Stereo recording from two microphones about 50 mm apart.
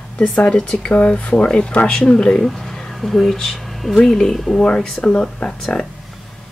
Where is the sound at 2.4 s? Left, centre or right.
Centre.